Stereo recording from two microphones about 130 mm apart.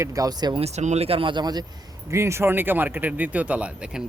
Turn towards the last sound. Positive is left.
turn(degrees=-10)  # may be behind; listen again after turning